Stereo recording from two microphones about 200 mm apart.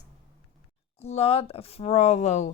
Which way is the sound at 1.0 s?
30° left (ahead or behind).